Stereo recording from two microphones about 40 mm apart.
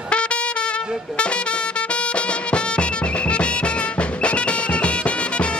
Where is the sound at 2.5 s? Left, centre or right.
Left.